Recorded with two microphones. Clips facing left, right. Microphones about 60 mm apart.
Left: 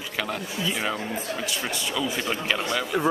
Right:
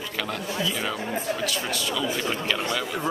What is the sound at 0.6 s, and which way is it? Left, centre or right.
Speech, left.